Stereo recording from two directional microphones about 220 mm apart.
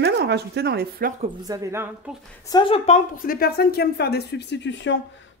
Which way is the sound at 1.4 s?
15° right (ahead or behind).